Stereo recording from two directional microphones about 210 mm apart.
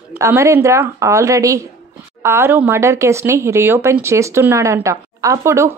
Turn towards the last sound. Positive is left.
turn(degrees=-15)  # may be behind; listen again after turning